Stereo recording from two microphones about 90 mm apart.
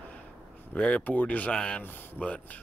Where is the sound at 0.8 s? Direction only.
15° left (ahead or behind).